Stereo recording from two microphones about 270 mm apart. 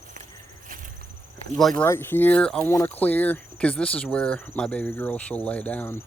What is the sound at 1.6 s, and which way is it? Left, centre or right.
Speech, centre.